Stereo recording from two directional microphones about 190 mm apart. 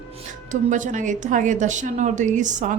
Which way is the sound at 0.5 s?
40° right (ahead or behind).